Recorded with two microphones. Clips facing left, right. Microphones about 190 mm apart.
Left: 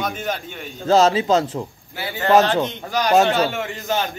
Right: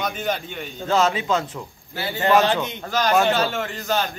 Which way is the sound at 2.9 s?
15° left (ahead or behind).